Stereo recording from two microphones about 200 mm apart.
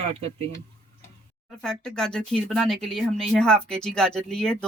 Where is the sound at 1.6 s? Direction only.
5° left (ahead or behind).